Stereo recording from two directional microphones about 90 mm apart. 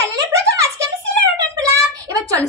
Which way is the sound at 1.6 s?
40° right (ahead or behind).